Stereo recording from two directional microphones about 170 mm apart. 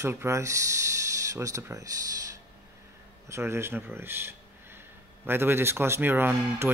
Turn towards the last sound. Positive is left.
turn(degrees=-15)  # may be behind; listen again after turning